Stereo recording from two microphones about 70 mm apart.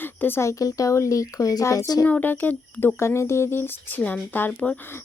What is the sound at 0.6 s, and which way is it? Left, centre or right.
Speech, left.